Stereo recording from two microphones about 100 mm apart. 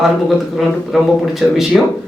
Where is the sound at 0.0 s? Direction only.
Centre (ahead or behind).